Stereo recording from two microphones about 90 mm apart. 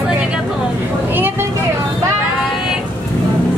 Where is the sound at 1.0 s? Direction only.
25° right (ahead or behind).